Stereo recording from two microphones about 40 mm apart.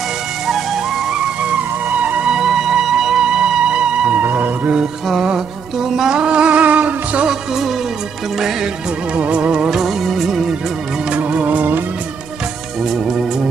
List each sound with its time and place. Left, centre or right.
2.0 s music: right
2.2 s music: centre
4.2 s cat: right
5.1 s music: centre
6.1 s music: right
6.6 s music: right
9.1 s music: right
9.7 s music: centre
11.1 s music: right